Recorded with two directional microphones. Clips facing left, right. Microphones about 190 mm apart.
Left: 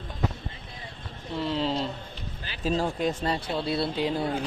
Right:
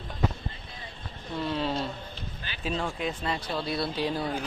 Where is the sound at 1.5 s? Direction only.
15° left (ahead or behind).